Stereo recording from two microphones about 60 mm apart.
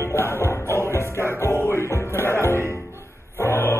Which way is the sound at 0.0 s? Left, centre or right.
Left.